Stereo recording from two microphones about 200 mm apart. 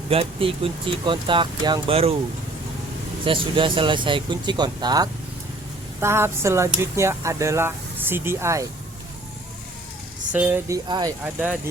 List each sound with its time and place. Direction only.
0.1 s speech: 30° right (ahead or behind)
3.2 s speech: 25° right (ahead or behind)
10.3 s speech: 10° right (ahead or behind)
10.8 s speech: 20° right (ahead or behind)